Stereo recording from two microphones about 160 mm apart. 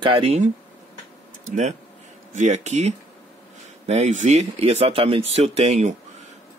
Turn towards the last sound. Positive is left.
turn(degrees=-45)  # may be behind; listen again after turning